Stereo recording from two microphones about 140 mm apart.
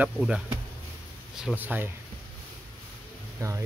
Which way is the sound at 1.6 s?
10° right (ahead or behind).